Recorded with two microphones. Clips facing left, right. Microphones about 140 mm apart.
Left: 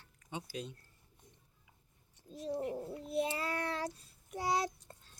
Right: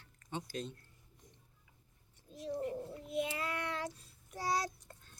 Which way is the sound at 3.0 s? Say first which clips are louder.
Left 2 dB; 35° left (ahead or behind).